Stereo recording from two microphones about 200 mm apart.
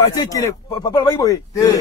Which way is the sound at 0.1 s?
20° left (ahead or behind).